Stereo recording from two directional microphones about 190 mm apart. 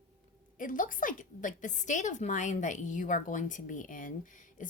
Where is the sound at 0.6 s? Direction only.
45° left (ahead or behind).